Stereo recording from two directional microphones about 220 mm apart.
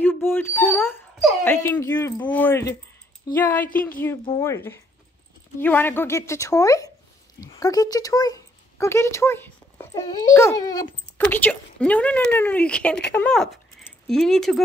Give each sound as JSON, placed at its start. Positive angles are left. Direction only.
{"t": 0.0, "sound": "speech", "side_deg": 10}